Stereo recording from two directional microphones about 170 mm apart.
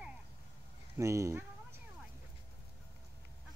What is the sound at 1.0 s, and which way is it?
Speech, 15° right (ahead or behind).